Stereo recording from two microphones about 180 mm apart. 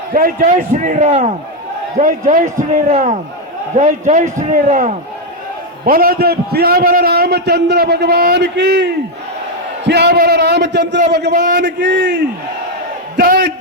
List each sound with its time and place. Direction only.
0.1 s a man's voice: 50° right (ahead or behind); by 11.0 s 75° right (ahead or behind)
11.3 s a man's voice: 45° right (ahead or behind)
11.6 s a man's voice: 75° right (ahead or behind)
13.1 s a man's voice: 60° right (ahead or behind)